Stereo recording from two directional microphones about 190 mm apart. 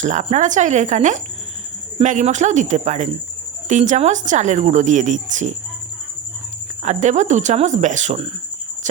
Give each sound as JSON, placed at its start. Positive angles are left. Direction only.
{"t": 0.0, "sound": "speech", "side_deg": -40}
{"t": 6.8, "sound": "speech", "side_deg": -35}